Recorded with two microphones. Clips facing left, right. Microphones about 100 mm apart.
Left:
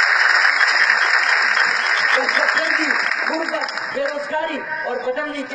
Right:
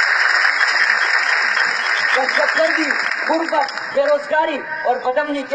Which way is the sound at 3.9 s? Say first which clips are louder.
Right 8 dB; 75° right (ahead or behind).